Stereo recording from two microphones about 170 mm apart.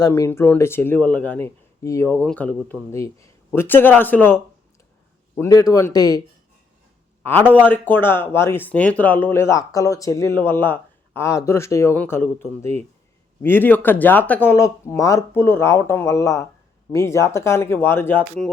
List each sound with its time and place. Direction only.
0.0 s a man's voice: 15° left (ahead or behind)
7.3 s speech: 10° left (ahead or behind)